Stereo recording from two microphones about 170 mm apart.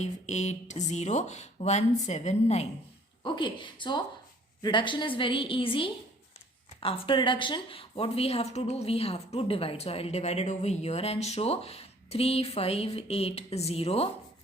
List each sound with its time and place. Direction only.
0.0 s speech: 40° left (ahead or behind)
3.2 s a woman's voice: 30° left (ahead or behind)